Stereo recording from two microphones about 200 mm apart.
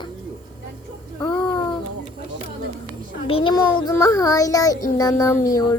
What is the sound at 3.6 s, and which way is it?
Child singing, 15° left (ahead or behind).